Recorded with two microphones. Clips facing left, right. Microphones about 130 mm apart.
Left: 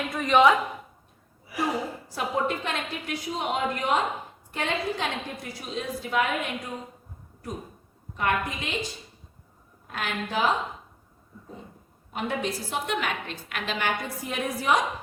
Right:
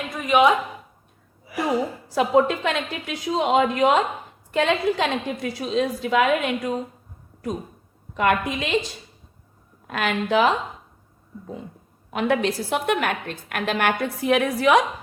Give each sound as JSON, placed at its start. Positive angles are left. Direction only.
{"t": 0.1, "sound": "a woman's voice", "side_deg": -5}
{"t": 2.0, "sound": "a woman's voice", "side_deg": -90}
{"t": 8.1, "sound": "a woman's voice", "side_deg": -90}
{"t": 12.1, "sound": "a woman's voice", "side_deg": -85}